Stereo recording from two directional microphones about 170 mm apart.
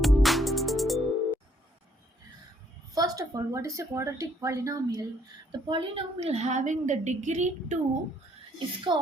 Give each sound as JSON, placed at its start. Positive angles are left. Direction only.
{"t": 0.0, "sound": "music", "side_deg": 0}
{"t": 2.9, "sound": "a woman's voice", "side_deg": -20}
{"t": 8.5, "sound": "speech", "side_deg": -25}